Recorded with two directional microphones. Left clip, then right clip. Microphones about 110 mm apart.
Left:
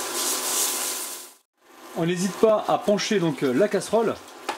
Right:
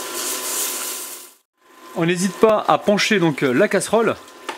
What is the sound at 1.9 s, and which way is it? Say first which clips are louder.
Speech: right 5 dB; 45° right (ahead or behind).